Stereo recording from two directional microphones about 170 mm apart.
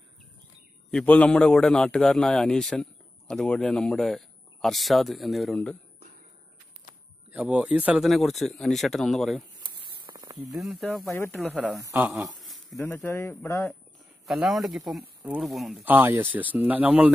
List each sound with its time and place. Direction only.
0.9 s a man's voice: 5° left (ahead or behind)
7.3 s a man's voice: 5° right (ahead or behind)
9.6 s a sound: 25° right (ahead or behind)
10.5 s a man's voice: centre (ahead or behind)
11.1 s speech: 15° left (ahead or behind)
11.3 s a man's voice: centre (ahead or behind)
11.7 s speech: 15° right (ahead or behind)
12.1 s a sound: centre (ahead or behind)
12.7 s speech: 15° left (ahead or behind)
14.2 s a man's voice: centre (ahead or behind)
15.8 s speech: 10° right (ahead or behind)